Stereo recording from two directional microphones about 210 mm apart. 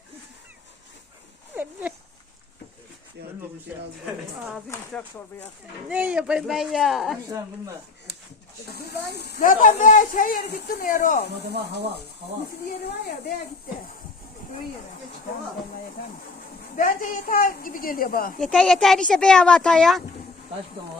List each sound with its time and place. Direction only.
1.5 s dog: 10° right (ahead or behind)
5.9 s speech: 5° right (ahead or behind)
7.3 s speech: 15° right (ahead or behind)
8.7 s speech: 50° left (ahead or behind)
12.6 s speech: 50° left (ahead or behind)
16.7 s speech: 40° left (ahead or behind)
18.3 s speech: centre (ahead or behind)